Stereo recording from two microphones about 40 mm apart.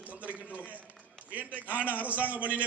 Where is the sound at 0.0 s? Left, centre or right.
Right.